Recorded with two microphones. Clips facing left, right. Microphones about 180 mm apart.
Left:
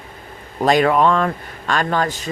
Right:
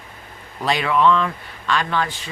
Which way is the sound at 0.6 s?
45° left (ahead or behind).